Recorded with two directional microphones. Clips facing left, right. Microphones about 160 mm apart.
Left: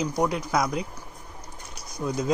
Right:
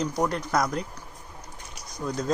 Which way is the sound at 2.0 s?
5° left (ahead or behind).